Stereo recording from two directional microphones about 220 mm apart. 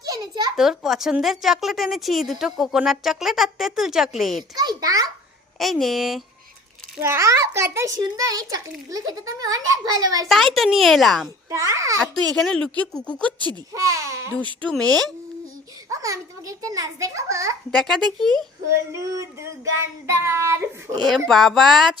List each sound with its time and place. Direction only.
0.0 s a sound: 15° right (ahead or behind)
0.5 s a woman's voice: centre (ahead or behind)
4.5 s a child's voice: 20° right (ahead or behind)
5.5 s a woman's voice: centre (ahead or behind)
6.9 s a child's voice: 10° right (ahead or behind)
10.2 s a woman's voice: centre (ahead or behind)
11.4 s a child's voice: 15° right (ahead or behind)
12.4 s a woman's voice: 5° left (ahead or behind)
13.5 s a child's voice: 15° right (ahead or behind)
14.3 s a woman's voice: 5° left (ahead or behind)
15.9 s a child's voice: 15° right (ahead or behind)
17.7 s a woman's voice: centre (ahead or behind)
18.9 s a child's voice: 15° right (ahead or behind)
21.2 s a woman's voice: centre (ahead or behind)